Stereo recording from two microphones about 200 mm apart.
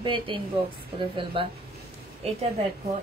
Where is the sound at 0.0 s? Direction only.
25° right (ahead or behind).